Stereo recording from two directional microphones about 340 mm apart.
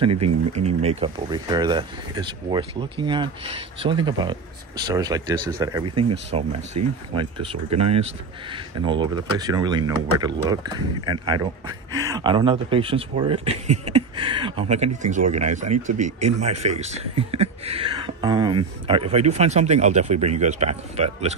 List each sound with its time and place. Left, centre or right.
0.2 s speech: centre